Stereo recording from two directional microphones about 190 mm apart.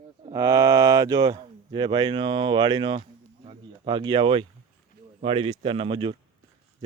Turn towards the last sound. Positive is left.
turn(degrees=-25)  # may be behind; listen again after turning